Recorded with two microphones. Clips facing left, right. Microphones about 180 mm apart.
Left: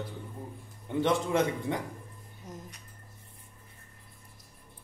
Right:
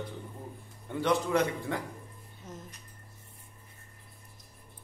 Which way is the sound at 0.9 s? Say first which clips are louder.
Left 1 dB; 20° left (ahead or behind).